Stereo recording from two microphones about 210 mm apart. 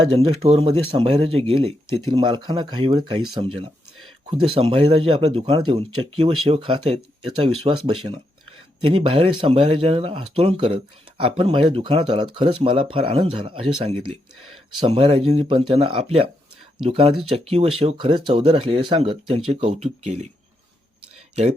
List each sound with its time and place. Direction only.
0.4 s speech: 30° right (ahead or behind)